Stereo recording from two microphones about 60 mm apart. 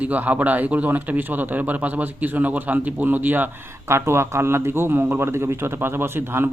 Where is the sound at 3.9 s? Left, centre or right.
Right.